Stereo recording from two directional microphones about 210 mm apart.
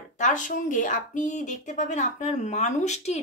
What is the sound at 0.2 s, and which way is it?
Speech, 35° left (ahead or behind).